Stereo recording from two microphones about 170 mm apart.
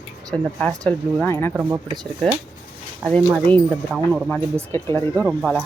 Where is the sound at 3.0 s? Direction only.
5° left (ahead or behind).